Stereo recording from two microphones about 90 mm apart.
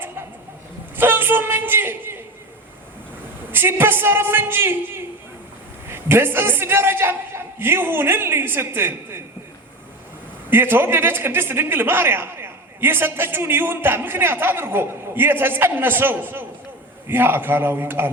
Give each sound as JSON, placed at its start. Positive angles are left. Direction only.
{"t": 0.9, "sound": "a sound", "side_deg": -25}
{"t": 3.5, "sound": "a man's voice", "side_deg": -25}
{"t": 10.5, "sound": "a man's voice", "side_deg": -25}